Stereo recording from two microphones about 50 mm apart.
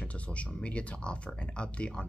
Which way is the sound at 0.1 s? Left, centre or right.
Left.